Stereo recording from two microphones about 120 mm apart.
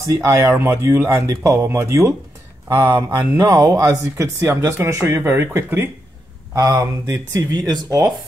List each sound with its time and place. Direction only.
0.1 s speech: 25° right (ahead or behind)